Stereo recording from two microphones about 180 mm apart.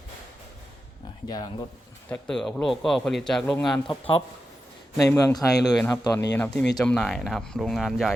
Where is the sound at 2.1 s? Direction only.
5° left (ahead or behind).